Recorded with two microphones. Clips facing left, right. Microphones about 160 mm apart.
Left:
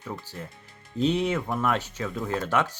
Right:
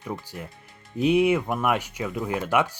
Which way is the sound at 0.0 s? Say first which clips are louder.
Right 3 dB; 15° right (ahead or behind).